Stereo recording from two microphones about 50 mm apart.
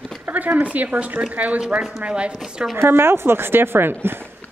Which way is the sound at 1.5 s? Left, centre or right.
Centre.